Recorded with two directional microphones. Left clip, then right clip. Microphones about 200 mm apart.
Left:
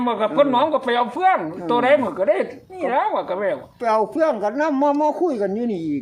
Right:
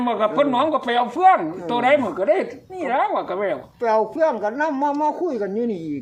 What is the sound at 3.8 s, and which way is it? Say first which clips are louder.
A man's voice: even; 50° left (ahead or behind).